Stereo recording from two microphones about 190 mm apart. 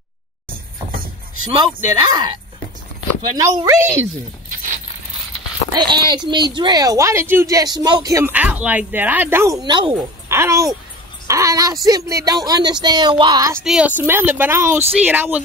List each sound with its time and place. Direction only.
1.9 s speech: 20° right (ahead or behind)
3.3 s speech: 15° right (ahead or behind)
5.8 s speech: 20° right (ahead or behind)
10.2 s a child's voice: 15° right (ahead or behind)
13.6 s speech: 5° right (ahead or behind)